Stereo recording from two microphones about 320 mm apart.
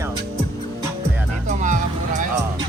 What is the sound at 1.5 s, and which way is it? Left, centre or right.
Music, right.